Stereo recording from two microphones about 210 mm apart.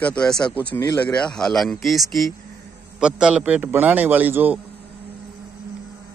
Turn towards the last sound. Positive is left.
turn(degrees=-10)  # may be behind; listen again after turning